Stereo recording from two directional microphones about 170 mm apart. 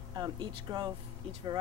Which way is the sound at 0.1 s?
25° right (ahead or behind).